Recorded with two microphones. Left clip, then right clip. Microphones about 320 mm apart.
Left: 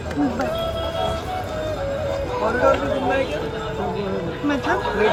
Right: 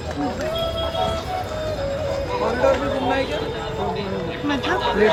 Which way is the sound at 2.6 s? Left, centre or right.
Right.